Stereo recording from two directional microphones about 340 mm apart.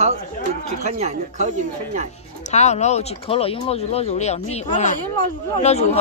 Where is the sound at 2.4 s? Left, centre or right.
Centre.